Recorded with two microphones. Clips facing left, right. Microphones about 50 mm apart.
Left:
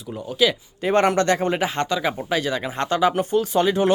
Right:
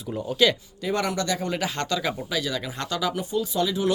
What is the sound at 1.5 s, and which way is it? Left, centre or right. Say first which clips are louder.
Speech: left 4 dB; left.